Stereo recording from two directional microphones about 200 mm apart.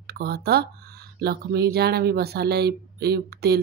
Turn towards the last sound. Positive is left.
turn(degrees=-50)  # may be behind; listen again after turning